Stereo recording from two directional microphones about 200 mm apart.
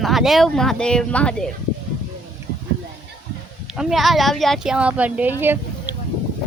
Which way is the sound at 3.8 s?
Centre (ahead or behind).